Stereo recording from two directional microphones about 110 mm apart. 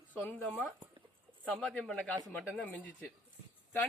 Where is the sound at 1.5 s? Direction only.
5° left (ahead or behind).